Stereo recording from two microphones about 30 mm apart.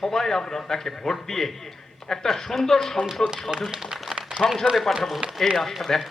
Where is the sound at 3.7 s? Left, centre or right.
Right.